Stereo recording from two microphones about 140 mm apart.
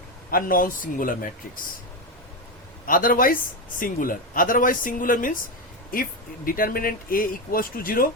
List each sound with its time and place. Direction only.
0.3 s a man's voice: 90° left
2.8 s a man's voice: 85° left
5.9 s speech: 90° left